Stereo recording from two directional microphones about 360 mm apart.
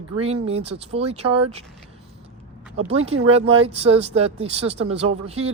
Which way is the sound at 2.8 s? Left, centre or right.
Right.